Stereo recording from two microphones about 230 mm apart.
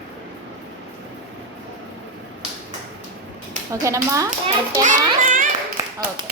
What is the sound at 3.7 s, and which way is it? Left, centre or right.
Speech, centre.